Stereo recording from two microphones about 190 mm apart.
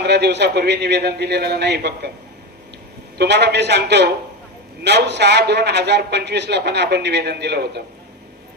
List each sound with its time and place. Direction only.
0.0 s a man's voice: 60° right (ahead or behind)
3.2 s a man's voice: 60° right (ahead or behind)